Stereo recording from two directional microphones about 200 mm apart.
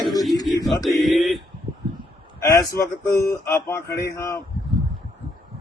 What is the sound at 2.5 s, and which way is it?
A man's voice, 15° left (ahead or behind).